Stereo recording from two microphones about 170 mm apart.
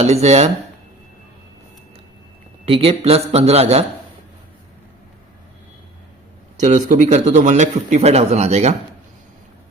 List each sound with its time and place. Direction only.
0.0 s a man's voice: 40° right (ahead or behind)
2.6 s a man's voice: 35° right (ahead or behind)
6.6 s a man's voice: 45° right (ahead or behind)